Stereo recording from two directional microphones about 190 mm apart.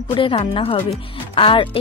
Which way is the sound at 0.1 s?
25° left (ahead or behind).